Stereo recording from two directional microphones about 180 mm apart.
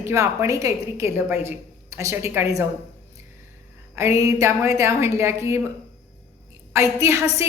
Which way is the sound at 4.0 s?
15° right (ahead or behind).